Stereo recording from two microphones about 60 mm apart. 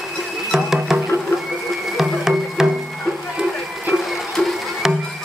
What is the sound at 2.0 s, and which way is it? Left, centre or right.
Music, centre.